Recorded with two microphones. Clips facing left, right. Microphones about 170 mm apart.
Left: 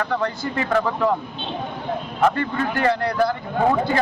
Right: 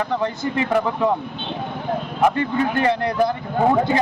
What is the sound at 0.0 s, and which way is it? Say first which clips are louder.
A man's voice: right 1 dB; 20° right (ahead or behind).